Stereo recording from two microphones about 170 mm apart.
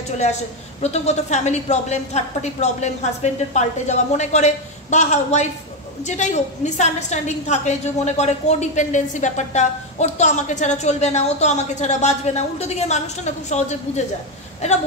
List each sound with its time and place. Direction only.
0.8 s a woman's voice: 40° left (ahead or behind)